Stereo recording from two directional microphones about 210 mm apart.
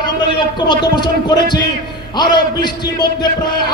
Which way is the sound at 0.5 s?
20° left (ahead or behind).